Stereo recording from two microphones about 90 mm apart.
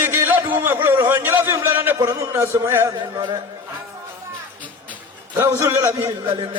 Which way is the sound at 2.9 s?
55° right (ahead or behind).